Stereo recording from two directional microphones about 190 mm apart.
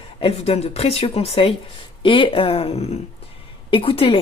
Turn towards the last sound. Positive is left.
turn(degrees=30)  # may be behind; listen again after turning